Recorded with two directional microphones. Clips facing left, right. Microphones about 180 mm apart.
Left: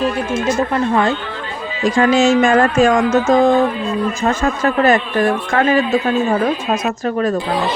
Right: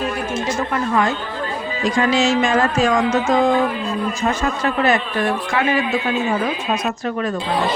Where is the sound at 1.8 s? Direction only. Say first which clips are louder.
Left 5 dB; 50° left (ahead or behind).